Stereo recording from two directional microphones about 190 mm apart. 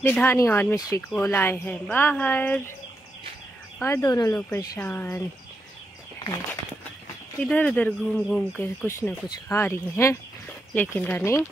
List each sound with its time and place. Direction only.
0.0 s speech: 10° left (ahead or behind)
3.8 s speech: 15° left (ahead or behind)
7.4 s speech: 5° left (ahead or behind)